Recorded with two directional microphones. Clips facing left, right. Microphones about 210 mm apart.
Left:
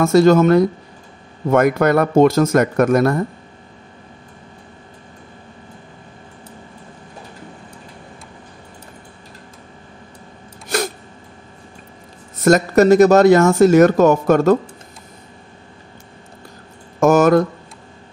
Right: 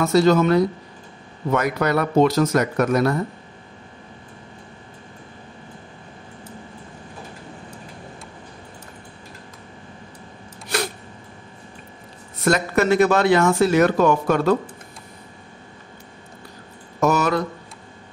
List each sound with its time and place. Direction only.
0.0 s speech: 50° left (ahead or behind)
12.4 s speech: 40° left (ahead or behind)
17.0 s a sound: 50° left (ahead or behind)